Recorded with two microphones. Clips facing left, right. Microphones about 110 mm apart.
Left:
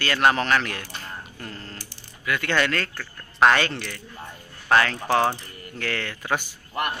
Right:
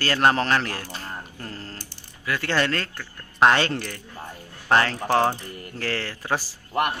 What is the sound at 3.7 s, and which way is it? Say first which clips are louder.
Speech: right 3 dB; 40° right (ahead or behind).